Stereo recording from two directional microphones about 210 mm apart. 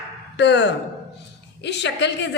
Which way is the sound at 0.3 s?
55° left (ahead or behind).